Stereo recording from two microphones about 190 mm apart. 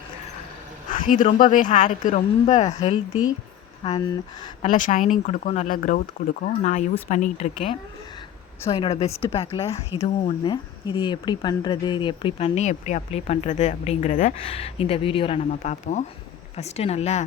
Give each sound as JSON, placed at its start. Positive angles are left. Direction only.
{"t": 1.0, "sound": "speech", "side_deg": 40}
{"t": 3.8, "sound": "speech", "side_deg": 25}
{"t": 4.6, "sound": "speech", "side_deg": 40}